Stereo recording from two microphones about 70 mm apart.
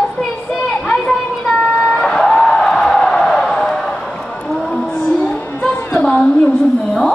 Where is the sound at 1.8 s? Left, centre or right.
Centre.